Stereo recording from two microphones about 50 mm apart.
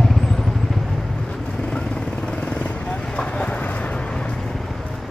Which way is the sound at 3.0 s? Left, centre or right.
Centre.